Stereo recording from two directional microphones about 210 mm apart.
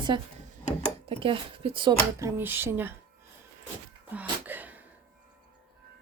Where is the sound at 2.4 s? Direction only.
10° right (ahead or behind).